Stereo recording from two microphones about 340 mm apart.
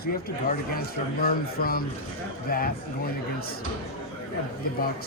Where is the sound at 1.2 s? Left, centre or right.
Left.